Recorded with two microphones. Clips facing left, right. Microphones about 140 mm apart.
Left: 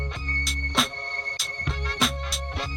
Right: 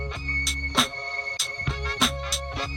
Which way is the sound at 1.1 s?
30° right (ahead or behind).